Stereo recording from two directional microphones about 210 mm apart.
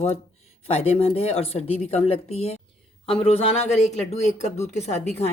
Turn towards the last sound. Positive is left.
turn(degrees=30)  # may be behind; listen again after turning